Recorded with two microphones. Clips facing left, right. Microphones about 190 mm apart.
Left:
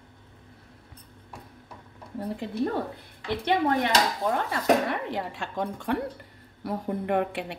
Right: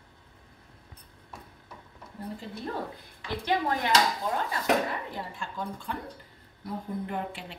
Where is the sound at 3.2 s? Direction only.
65° left (ahead or behind).